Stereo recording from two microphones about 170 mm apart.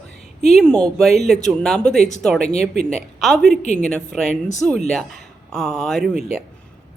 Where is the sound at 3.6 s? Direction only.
45° left (ahead or behind).